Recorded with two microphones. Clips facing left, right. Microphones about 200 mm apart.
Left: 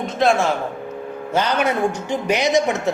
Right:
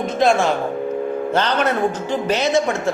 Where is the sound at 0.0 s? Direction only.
Centre (ahead or behind).